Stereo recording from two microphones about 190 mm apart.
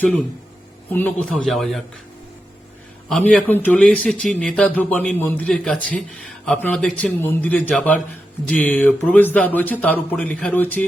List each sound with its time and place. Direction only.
0.9 s speech: 10° left (ahead or behind)
3.1 s a man's voice: 5° left (ahead or behind)